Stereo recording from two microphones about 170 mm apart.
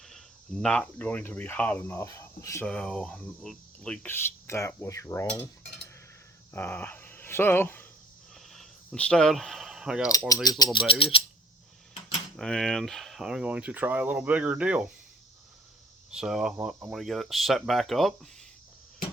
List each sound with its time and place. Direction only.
0.0 s speech: centre (ahead or behind); by 2.6 s 20° left (ahead or behind)
2.6 s speech: 5° left (ahead or behind)
6.5 s speech: 10° left (ahead or behind)
8.4 s a sound: centre (ahead or behind)
10.1 s speech: 20° left (ahead or behind)
11.1 s a sound: 30° left (ahead or behind)
12.4 s speech: centre (ahead or behind)
16.1 s speech: 5° right (ahead or behind)